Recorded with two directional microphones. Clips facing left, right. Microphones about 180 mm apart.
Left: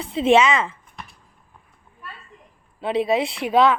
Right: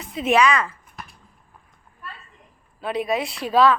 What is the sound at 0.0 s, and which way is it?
Speech, 30° left (ahead or behind).